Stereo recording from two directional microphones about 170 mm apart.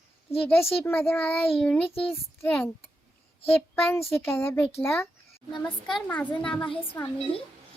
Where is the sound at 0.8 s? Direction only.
15° left (ahead or behind).